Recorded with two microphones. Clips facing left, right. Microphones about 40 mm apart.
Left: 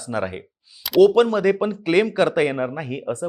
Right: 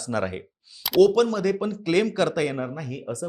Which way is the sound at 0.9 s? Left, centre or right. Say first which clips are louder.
Left 4 dB; left.